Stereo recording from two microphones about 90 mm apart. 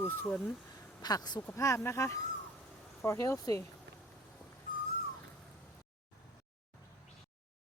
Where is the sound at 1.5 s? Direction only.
35° left (ahead or behind).